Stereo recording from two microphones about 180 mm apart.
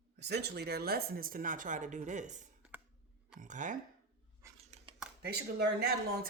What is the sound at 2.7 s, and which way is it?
Clicking, 10° right (ahead or behind).